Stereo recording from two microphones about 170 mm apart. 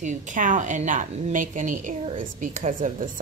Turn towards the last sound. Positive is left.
turn(degrees=-50)  # may be behind; listen again after turning